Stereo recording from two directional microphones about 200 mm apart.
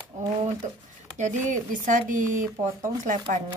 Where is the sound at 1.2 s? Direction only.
40° right (ahead or behind).